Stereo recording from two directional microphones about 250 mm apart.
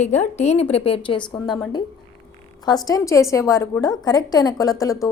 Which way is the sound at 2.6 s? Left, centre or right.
Centre.